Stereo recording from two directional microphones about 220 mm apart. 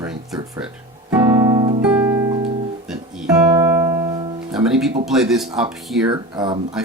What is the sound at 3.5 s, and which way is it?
Music, 15° right (ahead or behind).